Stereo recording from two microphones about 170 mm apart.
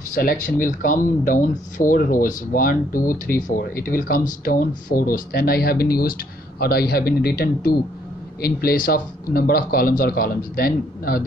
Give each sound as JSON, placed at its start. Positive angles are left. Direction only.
{"t": 0.1, "sound": "speech", "side_deg": 55}